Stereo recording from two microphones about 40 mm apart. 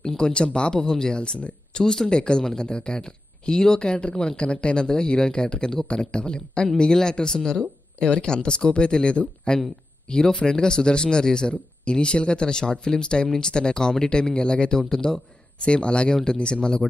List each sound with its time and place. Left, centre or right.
0.0 s speech: centre
4.4 s speech: left
15.6 s speech: left